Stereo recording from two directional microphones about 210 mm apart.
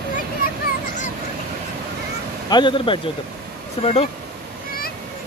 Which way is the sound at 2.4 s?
20° left (ahead or behind).